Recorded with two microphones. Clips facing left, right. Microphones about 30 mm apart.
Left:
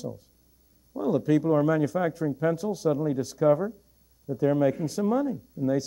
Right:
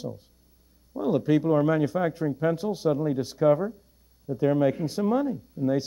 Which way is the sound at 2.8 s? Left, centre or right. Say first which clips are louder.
Right 1 dB; centre.